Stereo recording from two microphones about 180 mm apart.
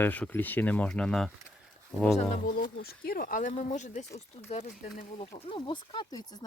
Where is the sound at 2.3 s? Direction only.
45° left (ahead or behind).